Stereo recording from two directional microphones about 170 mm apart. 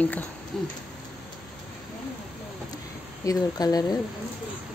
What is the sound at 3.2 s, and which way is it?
Speech, 20° left (ahead or behind).